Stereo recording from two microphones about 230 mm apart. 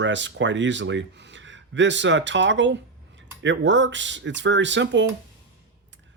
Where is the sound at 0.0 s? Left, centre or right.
Right.